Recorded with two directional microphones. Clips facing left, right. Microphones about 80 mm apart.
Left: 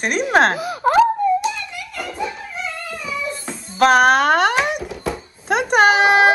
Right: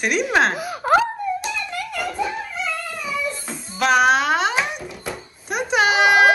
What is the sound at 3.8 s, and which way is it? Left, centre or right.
Speech, left.